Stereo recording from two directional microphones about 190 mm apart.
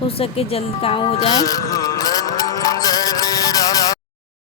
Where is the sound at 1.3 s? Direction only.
20° left (ahead or behind).